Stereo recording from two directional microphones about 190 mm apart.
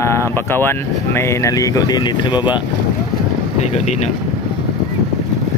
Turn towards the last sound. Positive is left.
turn(degrees=35)  # may be behind; listen again after turning